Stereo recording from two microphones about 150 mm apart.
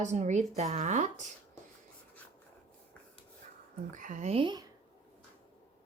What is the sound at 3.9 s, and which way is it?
Speech, 55° right (ahead or behind).